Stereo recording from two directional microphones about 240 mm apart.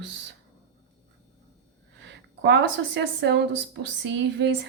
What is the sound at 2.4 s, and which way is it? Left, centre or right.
A woman's voice, right.